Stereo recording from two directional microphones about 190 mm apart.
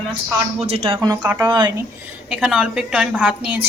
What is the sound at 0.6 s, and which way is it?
Speech, 30° right (ahead or behind).